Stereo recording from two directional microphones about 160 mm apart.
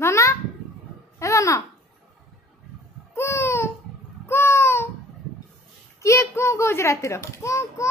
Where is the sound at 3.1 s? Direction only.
15° left (ahead or behind).